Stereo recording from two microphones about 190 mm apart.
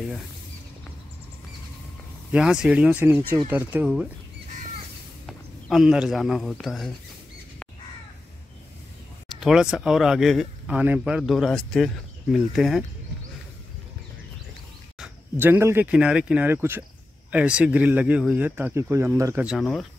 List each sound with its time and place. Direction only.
2.3 s speech: 5° right (ahead or behind)
5.2 s speech: centre (ahead or behind)
9.4 s speech: 5° right (ahead or behind)
15.0 s speech: 10° right (ahead or behind)
19.4 s speech: centre (ahead or behind)